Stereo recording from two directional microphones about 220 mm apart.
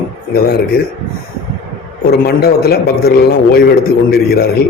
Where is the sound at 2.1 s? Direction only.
45° left (ahead or behind).